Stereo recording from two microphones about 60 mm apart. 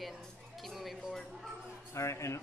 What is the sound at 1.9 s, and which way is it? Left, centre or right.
Speech, left.